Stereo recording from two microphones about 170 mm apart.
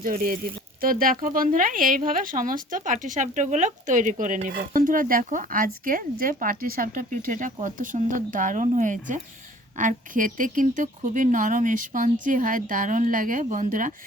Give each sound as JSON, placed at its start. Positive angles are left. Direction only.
{"t": 0.0, "sound": "speech", "side_deg": -55}